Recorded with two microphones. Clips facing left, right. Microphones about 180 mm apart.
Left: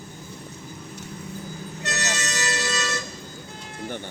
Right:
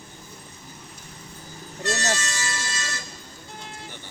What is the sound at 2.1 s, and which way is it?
Vehicle, 65° left (ahead or behind).